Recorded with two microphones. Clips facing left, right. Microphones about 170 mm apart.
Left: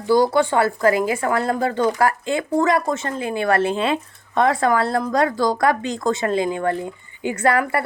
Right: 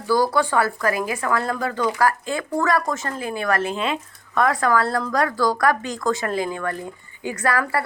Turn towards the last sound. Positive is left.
turn(degrees=25)  # may be behind; listen again after turning